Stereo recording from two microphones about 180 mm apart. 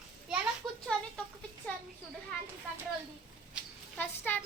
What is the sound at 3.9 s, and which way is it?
Speech, 10° left (ahead or behind).